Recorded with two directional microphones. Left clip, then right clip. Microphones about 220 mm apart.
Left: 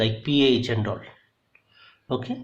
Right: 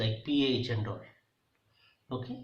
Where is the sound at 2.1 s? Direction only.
45° left (ahead or behind).